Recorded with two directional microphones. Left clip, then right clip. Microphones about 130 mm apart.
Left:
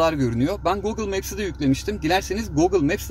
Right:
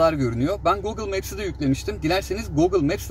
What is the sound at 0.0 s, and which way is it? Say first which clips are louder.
A man's voice: right 1 dB; 35° left (ahead or behind).